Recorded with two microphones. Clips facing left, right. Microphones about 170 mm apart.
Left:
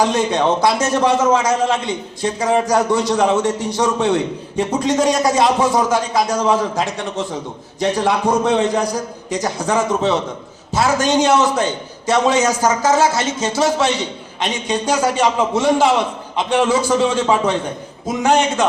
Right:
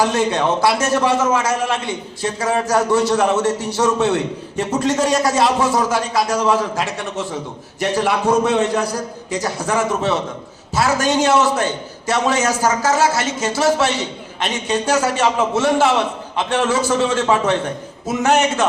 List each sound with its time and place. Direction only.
0.0 s a man's voice: 15° left (ahead or behind)
7.9 s a man's voice: 5° right (ahead or behind)
8.6 s a man's voice: 15° left (ahead or behind)